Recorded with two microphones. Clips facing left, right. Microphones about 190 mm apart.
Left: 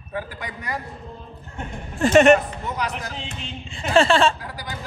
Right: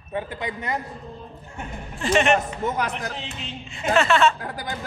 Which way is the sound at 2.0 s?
45° left (ahead or behind).